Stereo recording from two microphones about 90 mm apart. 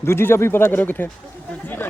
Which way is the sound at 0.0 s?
25° left (ahead or behind).